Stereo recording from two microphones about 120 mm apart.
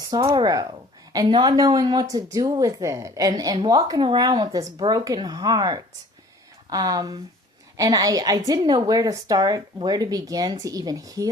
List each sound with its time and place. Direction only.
0.3 s a woman's voice: 30° right (ahead or behind)